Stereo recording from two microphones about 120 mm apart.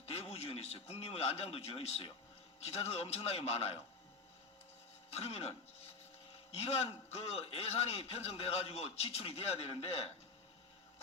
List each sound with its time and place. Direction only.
0.0 s a man's voice: 55° left (ahead or behind)
5.1 s a man's voice: 55° left (ahead or behind)